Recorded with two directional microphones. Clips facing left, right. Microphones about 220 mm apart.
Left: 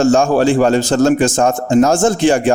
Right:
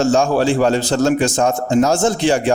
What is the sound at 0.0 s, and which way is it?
A man's voice, 50° left (ahead or behind).